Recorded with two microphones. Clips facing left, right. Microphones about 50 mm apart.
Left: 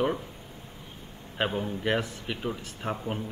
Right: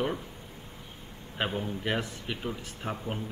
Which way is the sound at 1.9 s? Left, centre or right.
Centre.